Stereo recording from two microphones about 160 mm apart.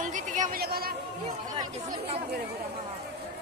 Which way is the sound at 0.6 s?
75° right (ahead or behind).